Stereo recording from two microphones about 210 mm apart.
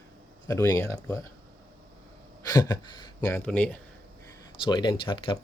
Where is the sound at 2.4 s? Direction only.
15° left (ahead or behind).